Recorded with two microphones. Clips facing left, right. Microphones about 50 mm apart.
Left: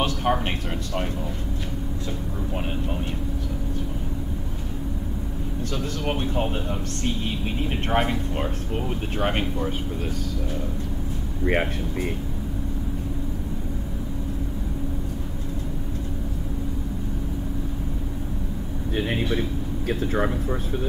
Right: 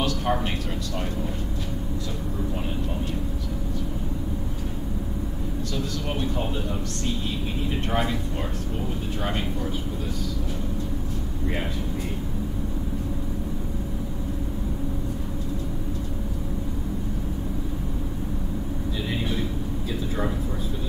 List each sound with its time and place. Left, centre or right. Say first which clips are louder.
0.0 s a sound: left 2 dB; left
6.0 s a man's voice: left 6 dB; left
7.9 s a man's voice: left 4 dB; left
18.9 s speech: left 5 dB; left